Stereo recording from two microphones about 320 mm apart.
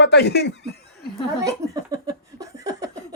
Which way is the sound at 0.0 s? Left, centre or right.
Left.